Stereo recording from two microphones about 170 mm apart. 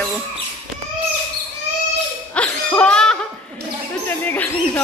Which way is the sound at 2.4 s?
5° left (ahead or behind).